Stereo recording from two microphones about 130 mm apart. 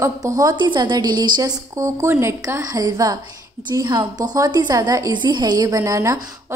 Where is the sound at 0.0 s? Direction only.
25° right (ahead or behind).